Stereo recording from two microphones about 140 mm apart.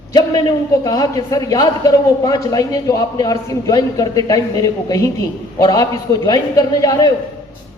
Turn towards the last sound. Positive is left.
turn(degrees=25)  # may be behind; listen again after turning